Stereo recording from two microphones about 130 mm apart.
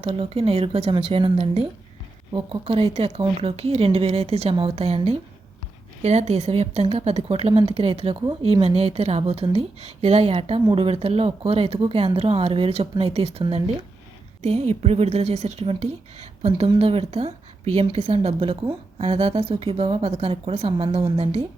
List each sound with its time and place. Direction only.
0.0 s a woman's voice: 50° right (ahead or behind)
6.0 s a woman's voice: 55° right (ahead or behind)
14.4 s a woman's voice: 55° right (ahead or behind)